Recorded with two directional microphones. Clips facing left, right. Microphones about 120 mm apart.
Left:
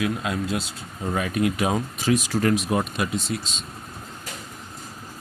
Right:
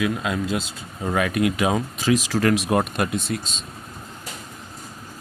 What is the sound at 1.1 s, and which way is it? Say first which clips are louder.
Speech: right 2 dB; 90° right.